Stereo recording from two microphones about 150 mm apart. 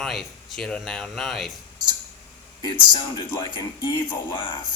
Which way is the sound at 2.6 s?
30° left (ahead or behind).